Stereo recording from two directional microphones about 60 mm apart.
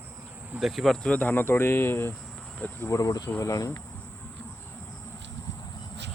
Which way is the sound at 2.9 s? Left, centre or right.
Left.